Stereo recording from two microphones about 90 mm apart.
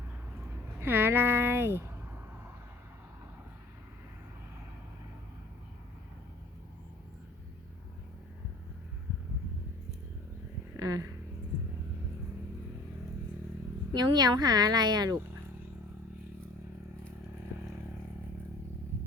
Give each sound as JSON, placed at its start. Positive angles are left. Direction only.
{"t": 0.8, "sound": "speech", "side_deg": -25}
{"t": 10.8, "sound": "speech", "side_deg": -40}
{"t": 13.9, "sound": "speech", "side_deg": -50}